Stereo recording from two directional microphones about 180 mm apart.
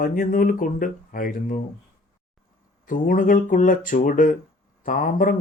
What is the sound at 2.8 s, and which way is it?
Speech, 50° left (ahead or behind).